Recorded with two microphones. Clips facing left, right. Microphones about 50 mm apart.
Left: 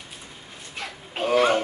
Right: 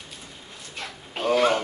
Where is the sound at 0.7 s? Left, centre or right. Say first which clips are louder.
Left 1 dB; centre.